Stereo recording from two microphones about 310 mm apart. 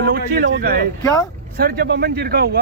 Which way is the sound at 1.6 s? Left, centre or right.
Right.